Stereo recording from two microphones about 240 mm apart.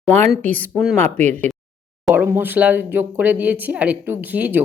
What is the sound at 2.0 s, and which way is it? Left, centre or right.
Speech, centre.